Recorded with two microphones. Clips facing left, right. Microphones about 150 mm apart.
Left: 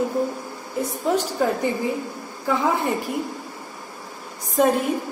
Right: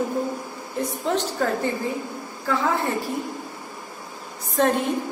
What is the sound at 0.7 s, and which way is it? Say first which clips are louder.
A woman's voice: left 2 dB; 10° left (ahead or behind).